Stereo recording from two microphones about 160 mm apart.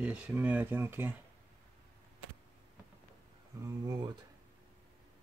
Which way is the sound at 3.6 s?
25° right (ahead or behind).